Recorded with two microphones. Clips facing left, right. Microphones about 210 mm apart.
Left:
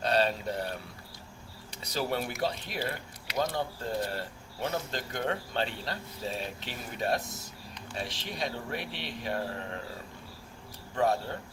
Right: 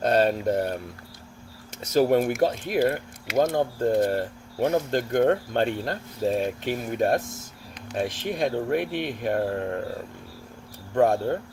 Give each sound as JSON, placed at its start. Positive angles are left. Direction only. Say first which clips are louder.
{"t": 0.0, "sound": "speech", "louder": "right 7 dB", "side_deg": -50}
{"t": 10.9, "sound": "speech", "louder": "right 8 dB", "side_deg": -50}